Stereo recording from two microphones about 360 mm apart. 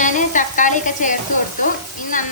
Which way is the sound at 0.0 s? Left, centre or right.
Left.